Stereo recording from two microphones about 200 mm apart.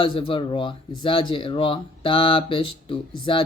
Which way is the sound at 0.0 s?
25° left (ahead or behind).